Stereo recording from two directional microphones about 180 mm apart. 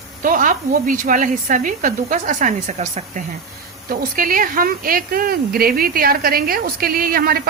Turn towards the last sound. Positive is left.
turn(degrees=-55)  # may be behind; listen again after turning